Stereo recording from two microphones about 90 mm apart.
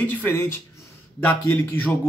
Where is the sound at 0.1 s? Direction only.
25° left (ahead or behind).